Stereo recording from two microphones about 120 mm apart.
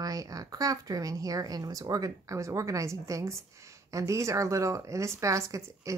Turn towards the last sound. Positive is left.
turn(degrees=-25)  # may be behind; listen again after turning